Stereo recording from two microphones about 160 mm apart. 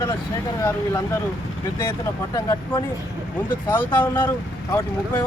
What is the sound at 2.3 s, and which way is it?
Speech, 25° left (ahead or behind).